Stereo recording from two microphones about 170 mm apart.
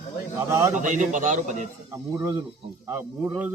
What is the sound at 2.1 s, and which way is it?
Speech, 20° right (ahead or behind).